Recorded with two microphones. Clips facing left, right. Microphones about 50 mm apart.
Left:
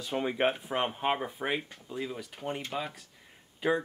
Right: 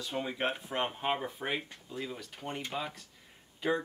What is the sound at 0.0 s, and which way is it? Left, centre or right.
Speech, left.